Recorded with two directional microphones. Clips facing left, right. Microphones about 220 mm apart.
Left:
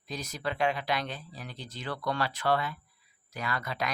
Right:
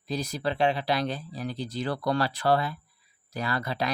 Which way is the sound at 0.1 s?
35° right (ahead or behind).